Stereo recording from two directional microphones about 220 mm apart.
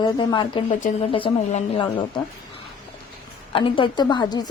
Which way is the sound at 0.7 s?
35° left (ahead or behind).